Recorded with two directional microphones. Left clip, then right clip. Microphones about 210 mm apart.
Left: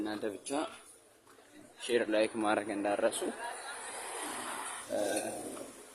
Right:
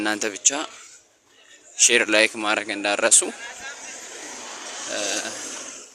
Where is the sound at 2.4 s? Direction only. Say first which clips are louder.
Right 8 dB; centre (ahead or behind).